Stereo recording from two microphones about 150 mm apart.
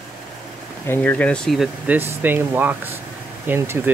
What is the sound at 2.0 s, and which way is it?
Speech, 15° right (ahead or behind).